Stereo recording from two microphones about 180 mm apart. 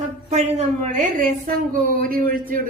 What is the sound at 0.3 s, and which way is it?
A woman's voice, 40° right (ahead or behind).